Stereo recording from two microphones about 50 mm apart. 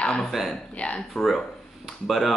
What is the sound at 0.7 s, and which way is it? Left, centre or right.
Speech, left.